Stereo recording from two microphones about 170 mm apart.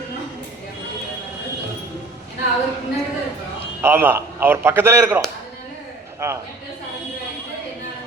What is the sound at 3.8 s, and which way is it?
A man's voice, 15° right (ahead or behind).